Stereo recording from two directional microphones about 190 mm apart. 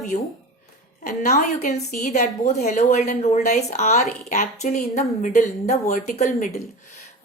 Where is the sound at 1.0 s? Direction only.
40° left (ahead or behind).